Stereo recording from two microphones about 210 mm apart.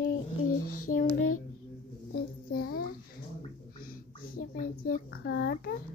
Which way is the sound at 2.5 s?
45° left (ahead or behind).